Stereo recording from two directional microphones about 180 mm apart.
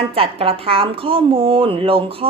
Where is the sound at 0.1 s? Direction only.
30° right (ahead or behind).